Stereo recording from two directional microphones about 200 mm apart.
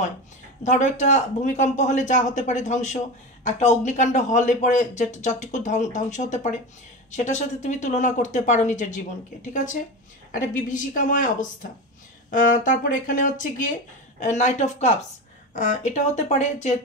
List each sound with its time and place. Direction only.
0.7 s speech: 35° left (ahead or behind)